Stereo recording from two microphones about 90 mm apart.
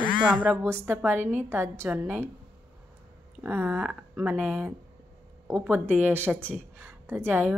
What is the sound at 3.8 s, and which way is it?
Speech, 10° right (ahead or behind).